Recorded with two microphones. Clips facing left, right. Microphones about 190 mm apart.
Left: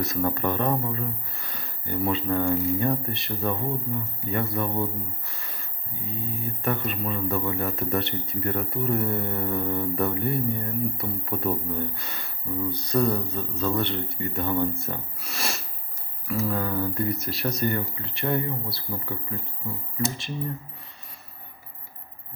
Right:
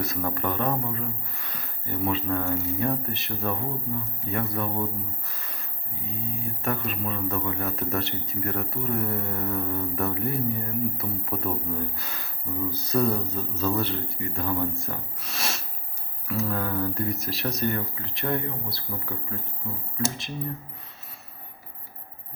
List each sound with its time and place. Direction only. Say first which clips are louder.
0.0 s speech: left 3 dB; centre (ahead or behind)